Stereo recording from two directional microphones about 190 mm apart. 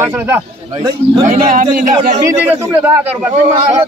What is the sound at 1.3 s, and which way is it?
Speech, 45° right (ahead or behind).